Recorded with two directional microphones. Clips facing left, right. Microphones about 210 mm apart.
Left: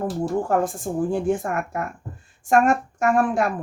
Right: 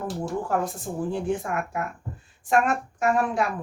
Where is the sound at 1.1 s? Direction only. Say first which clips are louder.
Left 4 dB; 45° left (ahead or behind).